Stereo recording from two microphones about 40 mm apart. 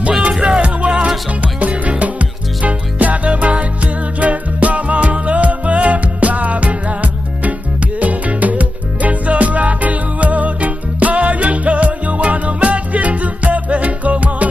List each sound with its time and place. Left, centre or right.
0.2 s music: right